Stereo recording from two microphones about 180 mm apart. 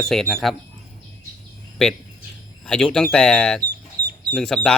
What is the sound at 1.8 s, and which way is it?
Speech, 5° left (ahead or behind).